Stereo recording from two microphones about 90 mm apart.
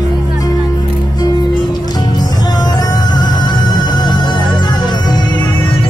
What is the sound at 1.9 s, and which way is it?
Music, 50° left (ahead or behind).